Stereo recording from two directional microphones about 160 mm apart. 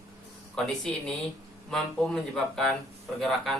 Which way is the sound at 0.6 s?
Centre (ahead or behind).